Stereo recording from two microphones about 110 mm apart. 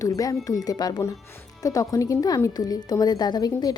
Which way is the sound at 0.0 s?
30° left (ahead or behind).